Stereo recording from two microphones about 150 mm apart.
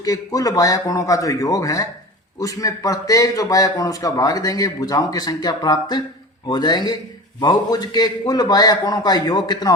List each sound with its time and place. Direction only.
0.0 s a man's voice: 25° left (ahead or behind)